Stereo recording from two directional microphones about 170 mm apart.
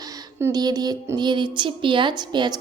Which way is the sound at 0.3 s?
20° right (ahead or behind).